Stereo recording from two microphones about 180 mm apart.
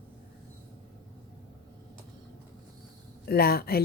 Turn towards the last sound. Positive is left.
turn(degrees=60)  # may be behind; listen again after turning